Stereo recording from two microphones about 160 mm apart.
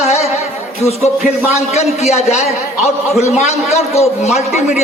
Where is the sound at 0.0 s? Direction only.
40° left (ahead or behind).